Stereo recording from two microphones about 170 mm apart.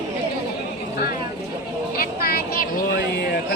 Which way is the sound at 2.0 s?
60° left (ahead or behind).